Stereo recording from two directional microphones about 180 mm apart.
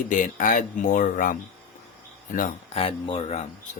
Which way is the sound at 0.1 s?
45° left (ahead or behind).